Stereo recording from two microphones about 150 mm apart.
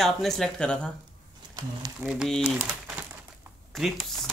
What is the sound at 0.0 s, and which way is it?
Speech, centre (ahead or behind).